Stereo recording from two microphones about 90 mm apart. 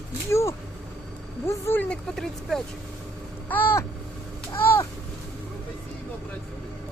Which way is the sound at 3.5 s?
20° left (ahead or behind).